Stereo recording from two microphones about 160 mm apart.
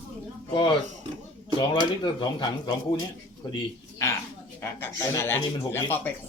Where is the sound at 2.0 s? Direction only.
25° left (ahead or behind).